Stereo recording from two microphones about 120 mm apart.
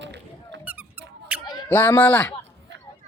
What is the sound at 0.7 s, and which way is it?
Squeak, 15° right (ahead or behind).